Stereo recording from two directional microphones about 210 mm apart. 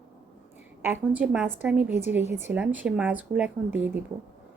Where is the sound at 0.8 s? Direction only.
10° right (ahead or behind).